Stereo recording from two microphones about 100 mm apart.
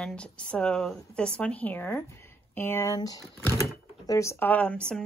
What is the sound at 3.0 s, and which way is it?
Speech, 40° left (ahead or behind).